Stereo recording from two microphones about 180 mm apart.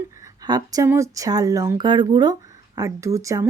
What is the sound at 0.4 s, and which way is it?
Speech, 20° right (ahead or behind).